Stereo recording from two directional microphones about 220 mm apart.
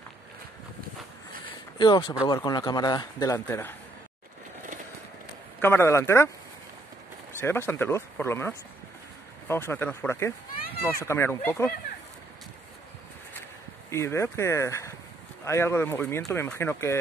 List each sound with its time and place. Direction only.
1.8 s a man's voice: 20° left (ahead or behind)
5.6 s a man's voice: 10° left (ahead or behind)
7.3 s a man's voice: 10° left (ahead or behind)
13.8 s a man's voice: 10° left (ahead or behind)